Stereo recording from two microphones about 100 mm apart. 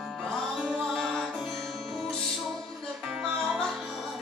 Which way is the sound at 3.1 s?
5° right (ahead or behind).